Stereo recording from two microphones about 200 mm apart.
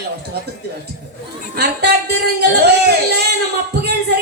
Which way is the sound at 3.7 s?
55° right (ahead or behind).